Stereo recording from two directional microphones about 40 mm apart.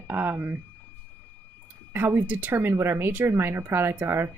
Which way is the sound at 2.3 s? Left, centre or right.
Right.